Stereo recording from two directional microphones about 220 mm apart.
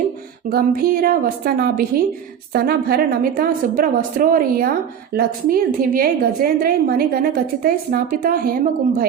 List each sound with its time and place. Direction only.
0.5 s a woman's voice: 40° right (ahead or behind)